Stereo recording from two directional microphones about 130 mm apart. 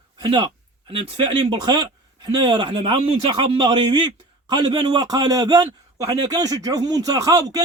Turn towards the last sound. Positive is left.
turn(degrees=-30)  # may be behind; listen again after turning